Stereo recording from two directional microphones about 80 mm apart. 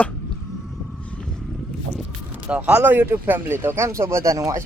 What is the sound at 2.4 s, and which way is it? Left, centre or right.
Speech, centre.